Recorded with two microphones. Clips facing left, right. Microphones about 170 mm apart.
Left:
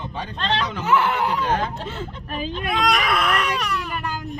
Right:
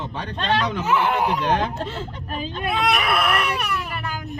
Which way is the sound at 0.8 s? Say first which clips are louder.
Even; 10° right (ahead or behind).